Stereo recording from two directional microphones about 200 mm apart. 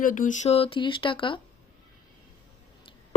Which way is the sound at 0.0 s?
40° left (ahead or behind).